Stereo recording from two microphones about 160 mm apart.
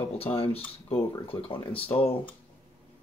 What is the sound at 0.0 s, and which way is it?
Speech, 35° left (ahead or behind).